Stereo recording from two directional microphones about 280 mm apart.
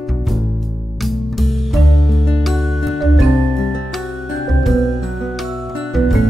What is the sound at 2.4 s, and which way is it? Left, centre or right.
Music, centre.